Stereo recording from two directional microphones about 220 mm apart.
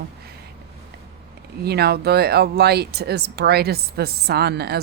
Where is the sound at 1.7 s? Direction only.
45° right (ahead or behind).